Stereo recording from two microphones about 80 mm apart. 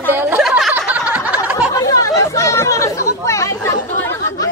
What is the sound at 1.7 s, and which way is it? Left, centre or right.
Chatter, left.